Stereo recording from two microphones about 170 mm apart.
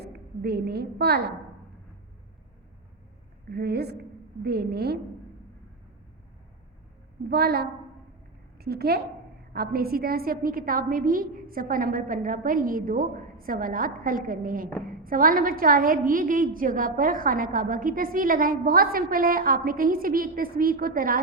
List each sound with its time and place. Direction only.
0.0 s a woman's voice: 70° right (ahead or behind)
3.5 s a woman's voice: 70° right (ahead or behind)
7.3 s a woman's voice: 70° right (ahead or behind)